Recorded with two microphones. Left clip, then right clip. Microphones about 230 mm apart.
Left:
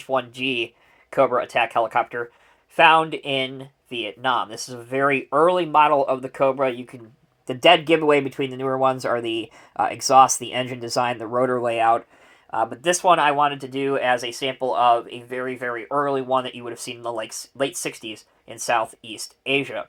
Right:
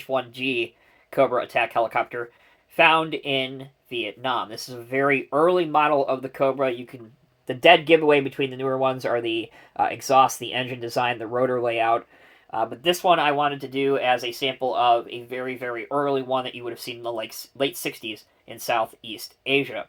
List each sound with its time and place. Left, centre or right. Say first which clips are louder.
0.3 s speech: left 1 dB; left